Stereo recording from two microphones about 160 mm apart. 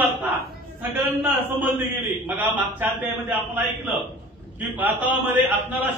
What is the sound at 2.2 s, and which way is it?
A man's voice, 10° right (ahead or behind).